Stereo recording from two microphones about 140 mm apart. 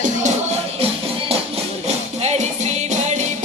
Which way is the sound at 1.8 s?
50° right (ahead or behind).